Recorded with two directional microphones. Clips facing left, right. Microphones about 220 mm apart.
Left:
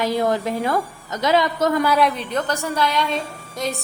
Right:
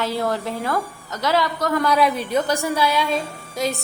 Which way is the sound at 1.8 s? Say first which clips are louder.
Even; centre (ahead or behind).